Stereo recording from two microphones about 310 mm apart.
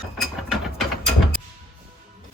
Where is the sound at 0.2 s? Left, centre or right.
Centre.